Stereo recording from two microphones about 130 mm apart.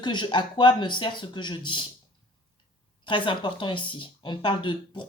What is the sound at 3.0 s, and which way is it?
Speech, 40° left (ahead or behind).